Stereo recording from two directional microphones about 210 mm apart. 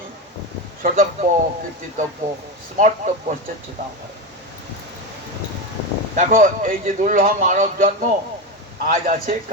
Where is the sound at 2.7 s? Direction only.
40° right (ahead or behind).